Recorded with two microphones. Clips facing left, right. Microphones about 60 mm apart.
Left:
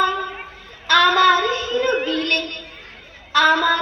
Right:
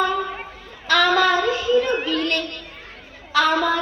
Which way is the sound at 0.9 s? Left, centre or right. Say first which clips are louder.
Left 3 dB; left.